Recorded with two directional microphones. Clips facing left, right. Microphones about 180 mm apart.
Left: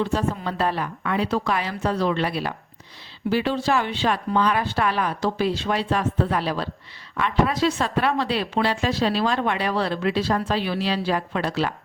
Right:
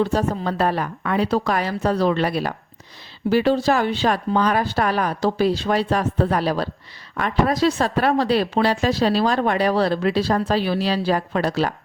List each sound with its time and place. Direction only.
0.0 s a woman's voice: 40° right (ahead or behind)